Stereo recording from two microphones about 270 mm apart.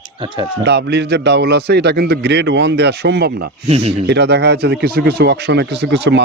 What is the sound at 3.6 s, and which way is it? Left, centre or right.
Speech, right.